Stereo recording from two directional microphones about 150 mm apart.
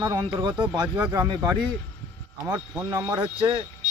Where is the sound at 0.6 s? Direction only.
25° right (ahead or behind).